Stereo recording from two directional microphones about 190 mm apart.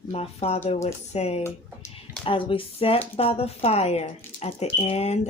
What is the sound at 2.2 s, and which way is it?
Speech, 25° left (ahead or behind).